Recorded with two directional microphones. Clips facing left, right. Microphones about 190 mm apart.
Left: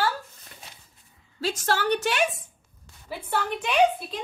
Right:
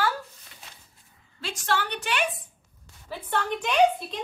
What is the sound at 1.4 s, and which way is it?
Speech, 40° left (ahead or behind).